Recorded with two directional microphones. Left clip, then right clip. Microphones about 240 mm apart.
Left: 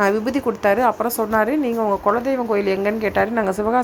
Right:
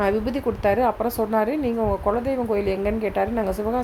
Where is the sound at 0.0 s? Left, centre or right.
Centre.